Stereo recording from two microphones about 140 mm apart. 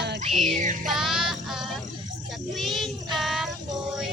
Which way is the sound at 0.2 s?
50° right (ahead or behind).